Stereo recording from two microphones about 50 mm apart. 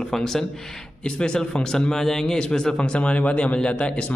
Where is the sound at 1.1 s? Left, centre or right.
Centre.